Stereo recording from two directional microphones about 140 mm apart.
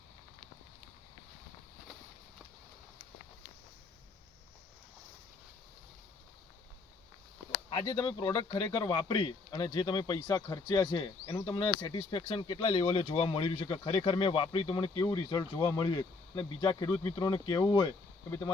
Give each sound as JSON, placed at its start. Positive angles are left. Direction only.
{"t": 7.7, "sound": "speech", "side_deg": 35}
{"t": 15.0, "sound": "speech", "side_deg": 30}